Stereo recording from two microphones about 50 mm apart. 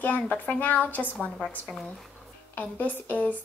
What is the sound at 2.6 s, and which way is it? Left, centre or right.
Speech, left.